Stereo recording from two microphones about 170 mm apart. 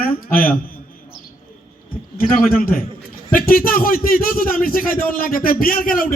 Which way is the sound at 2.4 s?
55° left (ahead or behind).